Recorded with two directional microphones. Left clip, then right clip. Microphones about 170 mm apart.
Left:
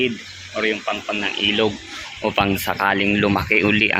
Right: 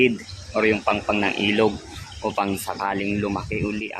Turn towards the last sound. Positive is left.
turn(degrees=30)  # may be behind; listen again after turning